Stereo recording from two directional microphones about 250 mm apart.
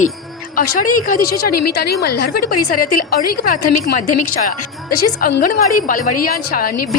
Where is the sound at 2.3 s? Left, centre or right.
Left.